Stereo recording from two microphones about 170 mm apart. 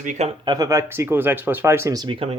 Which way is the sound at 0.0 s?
45° right (ahead or behind).